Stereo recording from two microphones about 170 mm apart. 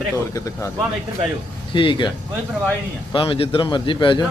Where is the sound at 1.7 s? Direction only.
30° left (ahead or behind).